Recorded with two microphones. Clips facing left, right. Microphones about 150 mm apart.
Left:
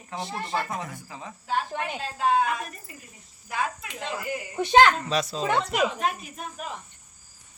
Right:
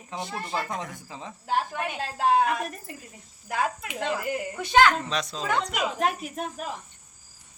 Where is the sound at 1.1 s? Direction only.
20° right (ahead or behind).